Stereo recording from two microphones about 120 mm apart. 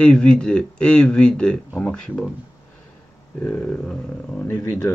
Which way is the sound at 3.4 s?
15° left (ahead or behind).